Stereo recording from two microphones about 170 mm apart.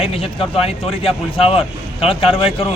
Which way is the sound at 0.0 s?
35° left (ahead or behind).